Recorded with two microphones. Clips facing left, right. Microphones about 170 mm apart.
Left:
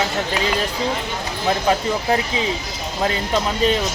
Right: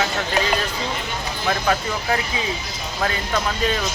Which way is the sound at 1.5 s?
25° left (ahead or behind).